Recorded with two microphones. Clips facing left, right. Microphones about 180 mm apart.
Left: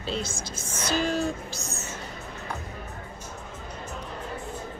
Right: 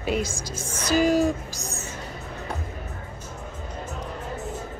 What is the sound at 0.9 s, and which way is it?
Speech, 10° right (ahead or behind).